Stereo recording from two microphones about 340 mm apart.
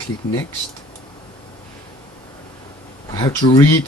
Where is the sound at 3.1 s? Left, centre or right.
Centre.